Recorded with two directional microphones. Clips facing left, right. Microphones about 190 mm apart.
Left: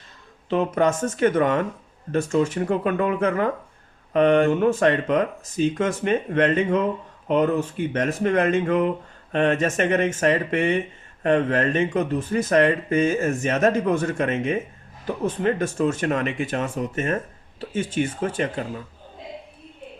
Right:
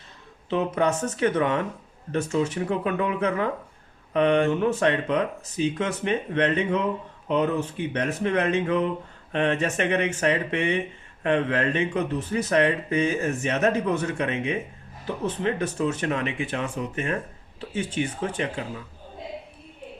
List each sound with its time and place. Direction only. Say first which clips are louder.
0.5 s speech: left 3 dB; 45° left (ahead or behind)